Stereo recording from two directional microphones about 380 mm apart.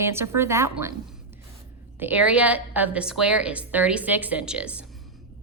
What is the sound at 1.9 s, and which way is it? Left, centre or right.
A woman's voice, centre.